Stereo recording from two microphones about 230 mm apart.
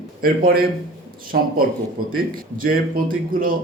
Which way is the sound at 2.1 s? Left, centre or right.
Right.